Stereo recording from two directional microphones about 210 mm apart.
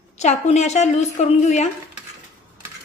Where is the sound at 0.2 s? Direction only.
35° left (ahead or behind).